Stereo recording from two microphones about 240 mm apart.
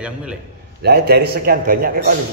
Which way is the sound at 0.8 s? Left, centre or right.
Right.